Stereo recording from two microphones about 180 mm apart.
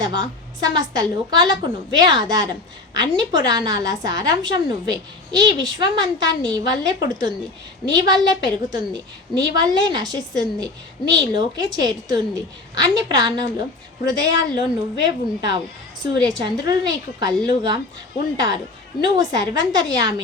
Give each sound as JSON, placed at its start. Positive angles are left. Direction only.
{"t": 0.0, "sound": "a woman's voice", "side_deg": -20}